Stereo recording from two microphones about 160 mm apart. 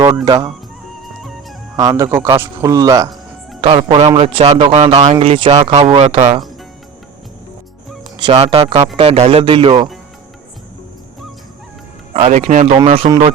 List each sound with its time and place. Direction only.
0.3 s speech: 25° right (ahead or behind)
1.0 s music: centre (ahead or behind)
1.7 s speech: 20° right (ahead or behind)
3.6 s speech: 35° right (ahead or behind)
8.1 s speech: 35° right (ahead or behind)
12.1 s a man's voice: 40° right (ahead or behind)
12.6 s speech: 35° right (ahead or behind)